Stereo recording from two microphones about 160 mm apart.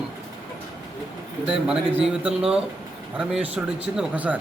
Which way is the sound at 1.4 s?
5° right (ahead or behind).